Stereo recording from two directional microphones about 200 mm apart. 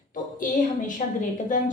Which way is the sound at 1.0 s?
40° left (ahead or behind).